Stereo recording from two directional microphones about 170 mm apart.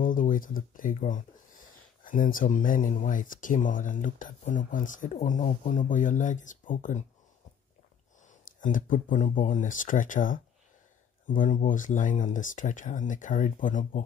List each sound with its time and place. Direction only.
0.0 s speech: 50° left (ahead or behind)
8.3 s speech: 50° left (ahead or behind)